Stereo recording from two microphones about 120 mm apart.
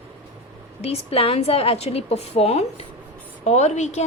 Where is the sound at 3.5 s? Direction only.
75° left (ahead or behind).